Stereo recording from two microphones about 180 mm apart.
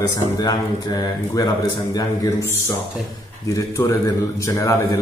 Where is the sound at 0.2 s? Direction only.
20° left (ahead or behind).